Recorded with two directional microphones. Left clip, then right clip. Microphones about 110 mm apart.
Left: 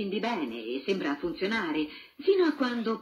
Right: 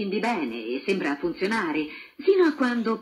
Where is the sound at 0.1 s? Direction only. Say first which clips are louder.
Right 7 dB; 45° right (ahead or behind).